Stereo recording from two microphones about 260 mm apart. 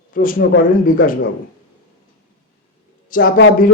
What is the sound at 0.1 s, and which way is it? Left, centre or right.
Speech, left.